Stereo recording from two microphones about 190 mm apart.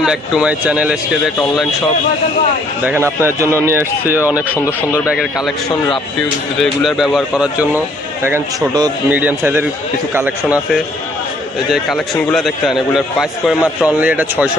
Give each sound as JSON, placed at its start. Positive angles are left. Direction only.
{"t": 0.0, "sound": "speech", "side_deg": -5}
{"t": 2.8, "sound": "speech", "side_deg": -10}